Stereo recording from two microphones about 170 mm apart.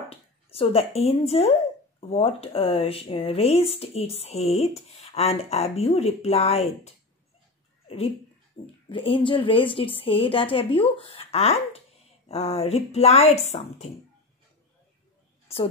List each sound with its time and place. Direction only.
0.1 s speech: 35° left (ahead or behind)
8.8 s speech: 30° left (ahead or behind)
15.4 s a sound: 35° left (ahead or behind)